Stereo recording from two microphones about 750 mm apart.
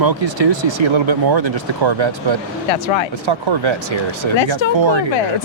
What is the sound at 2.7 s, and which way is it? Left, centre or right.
Speech, left.